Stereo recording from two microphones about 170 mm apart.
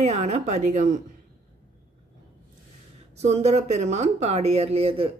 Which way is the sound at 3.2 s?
40° right (ahead or behind).